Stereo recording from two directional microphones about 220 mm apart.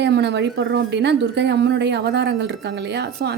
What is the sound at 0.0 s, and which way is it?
Speech, 50° right (ahead or behind).